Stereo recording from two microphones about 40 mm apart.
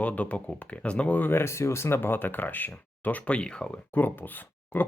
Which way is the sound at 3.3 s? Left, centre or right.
Left.